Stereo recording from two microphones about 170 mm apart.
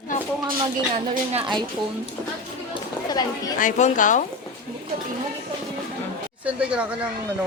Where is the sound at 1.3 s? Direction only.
30° right (ahead or behind).